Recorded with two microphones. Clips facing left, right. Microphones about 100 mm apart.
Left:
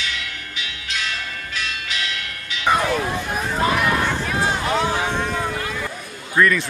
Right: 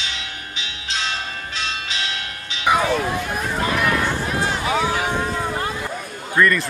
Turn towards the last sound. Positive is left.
turn(degrees=0)  # may be behind; listen again after turning